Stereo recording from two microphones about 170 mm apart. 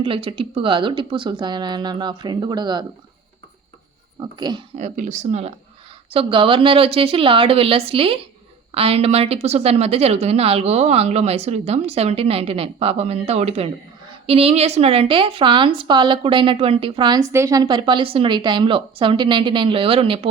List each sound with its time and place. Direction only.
0.0 s a woman's voice: 30° right (ahead or behind)
4.2 s a woman's voice: 25° right (ahead or behind)
4.8 s a woman's voice: 45° right (ahead or behind)